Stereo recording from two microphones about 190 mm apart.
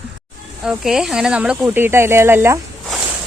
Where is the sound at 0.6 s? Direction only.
5° right (ahead or behind).